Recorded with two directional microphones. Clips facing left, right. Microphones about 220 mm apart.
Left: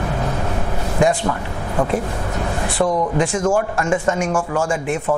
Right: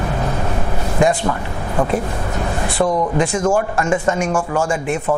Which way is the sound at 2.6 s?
30° right (ahead or behind).